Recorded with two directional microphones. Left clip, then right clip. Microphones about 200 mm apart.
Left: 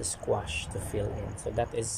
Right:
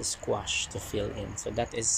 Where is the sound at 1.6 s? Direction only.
5° left (ahead or behind).